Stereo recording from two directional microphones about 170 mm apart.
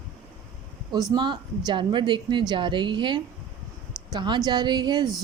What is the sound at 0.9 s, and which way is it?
A woman's voice, 25° right (ahead or behind).